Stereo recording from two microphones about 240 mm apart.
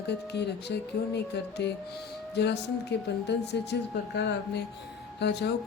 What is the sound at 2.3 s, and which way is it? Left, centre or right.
Speech, left.